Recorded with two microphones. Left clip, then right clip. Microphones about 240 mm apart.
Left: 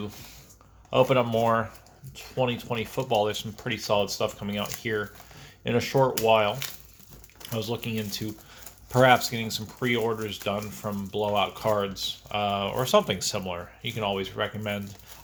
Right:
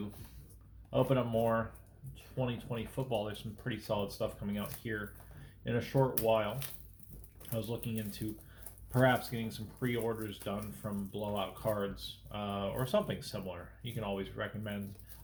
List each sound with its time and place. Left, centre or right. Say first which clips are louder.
0.9 s speech: left 10 dB; left
2.4 s speech: left 11 dB; left
7.6 s speech: left 11 dB; left